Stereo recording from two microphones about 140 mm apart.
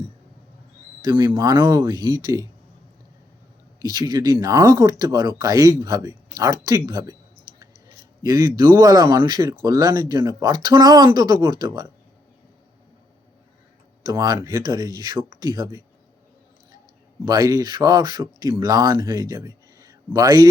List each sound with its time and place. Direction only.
1.0 s speech: 35° right (ahead or behind)
3.8 s speech: 30° right (ahead or behind)
8.2 s speech: 30° right (ahead or behind)
14.0 s speech: 30° right (ahead or behind)
17.2 s speech: 25° right (ahead or behind)